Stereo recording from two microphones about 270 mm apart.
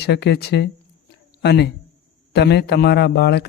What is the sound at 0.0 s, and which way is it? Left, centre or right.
A man's voice, left.